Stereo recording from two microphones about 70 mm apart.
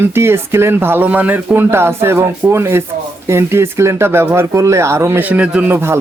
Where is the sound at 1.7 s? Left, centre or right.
Right.